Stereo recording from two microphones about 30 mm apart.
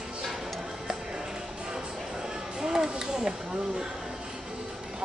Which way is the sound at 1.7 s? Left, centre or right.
Right.